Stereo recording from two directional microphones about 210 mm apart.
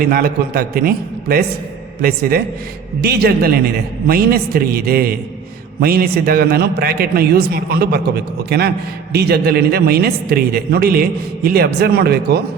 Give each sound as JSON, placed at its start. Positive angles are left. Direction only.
{"t": 0.0, "sound": "a man's voice", "side_deg": -45}